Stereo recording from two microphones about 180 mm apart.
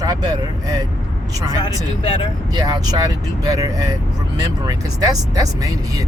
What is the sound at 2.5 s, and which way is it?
Speech, 20° right (ahead or behind).